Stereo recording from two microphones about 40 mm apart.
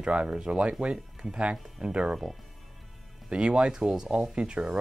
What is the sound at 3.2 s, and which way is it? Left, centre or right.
Speech, right.